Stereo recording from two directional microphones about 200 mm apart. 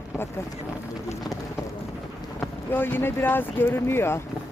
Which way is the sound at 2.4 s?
10° left (ahead or behind).